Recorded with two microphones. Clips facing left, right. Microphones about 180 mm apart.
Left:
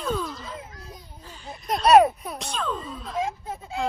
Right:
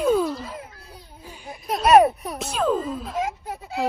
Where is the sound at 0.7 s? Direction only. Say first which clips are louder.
Left 2 dB; 30° right (ahead or behind).